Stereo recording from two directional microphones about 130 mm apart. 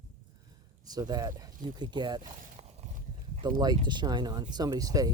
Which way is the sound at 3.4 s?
30° right (ahead or behind).